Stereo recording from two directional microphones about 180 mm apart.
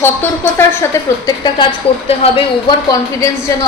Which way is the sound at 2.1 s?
30° left (ahead or behind).